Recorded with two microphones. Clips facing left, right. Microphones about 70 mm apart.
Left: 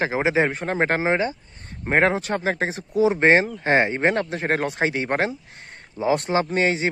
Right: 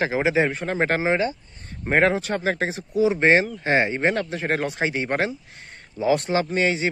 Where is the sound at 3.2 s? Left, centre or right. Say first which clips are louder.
Left 1 dB; left.